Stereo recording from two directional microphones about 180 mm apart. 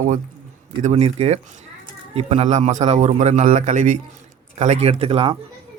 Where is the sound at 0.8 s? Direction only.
40° right (ahead or behind).